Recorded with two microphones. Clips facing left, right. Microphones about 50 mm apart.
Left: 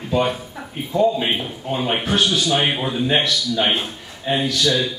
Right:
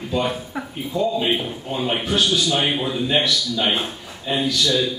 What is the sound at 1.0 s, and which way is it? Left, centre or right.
Speech, centre.